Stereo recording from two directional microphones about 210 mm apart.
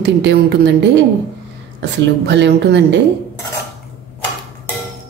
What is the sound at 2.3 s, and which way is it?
Speech, 55° right (ahead or behind).